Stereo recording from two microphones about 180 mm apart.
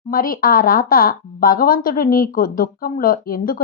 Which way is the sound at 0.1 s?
55° left (ahead or behind).